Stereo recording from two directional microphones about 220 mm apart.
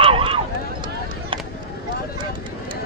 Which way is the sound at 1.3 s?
25° right (ahead or behind).